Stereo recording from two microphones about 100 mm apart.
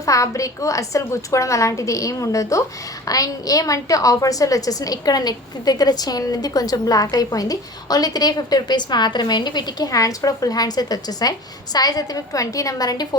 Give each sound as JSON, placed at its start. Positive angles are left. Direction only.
{"t": 0.0, "sound": "a woman's voice", "side_deg": 35}